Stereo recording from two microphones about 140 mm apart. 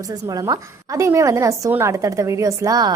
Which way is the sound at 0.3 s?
25° right (ahead or behind).